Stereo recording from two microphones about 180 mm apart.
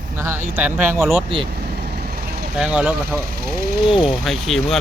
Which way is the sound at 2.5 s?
5° right (ahead or behind).